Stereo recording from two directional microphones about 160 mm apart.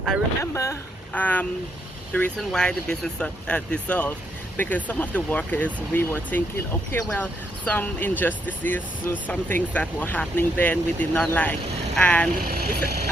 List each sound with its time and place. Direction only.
0.5 s speech: 20° left (ahead or behind)
12.5 s speech: 75° right (ahead or behind)